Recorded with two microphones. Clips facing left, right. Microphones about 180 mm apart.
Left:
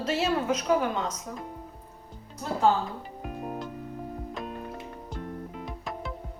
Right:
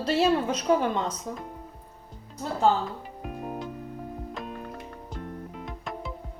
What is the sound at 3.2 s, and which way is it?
Music, centre (ahead or behind).